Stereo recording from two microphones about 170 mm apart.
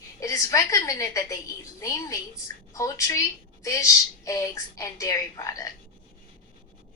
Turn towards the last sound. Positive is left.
turn(degrees=20)  # may be behind; listen again after turning